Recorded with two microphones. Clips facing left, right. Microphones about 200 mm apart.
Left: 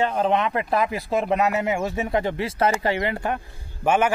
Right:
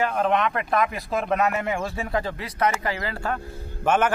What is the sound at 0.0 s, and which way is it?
A man's voice, 30° left (ahead or behind).